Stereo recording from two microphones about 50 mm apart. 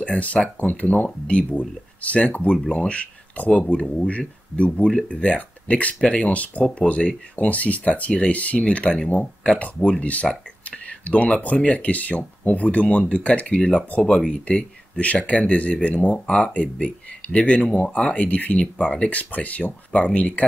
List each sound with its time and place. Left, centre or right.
0.1 s speech: left